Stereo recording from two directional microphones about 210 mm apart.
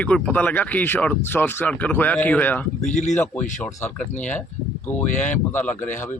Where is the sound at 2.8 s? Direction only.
35° left (ahead or behind).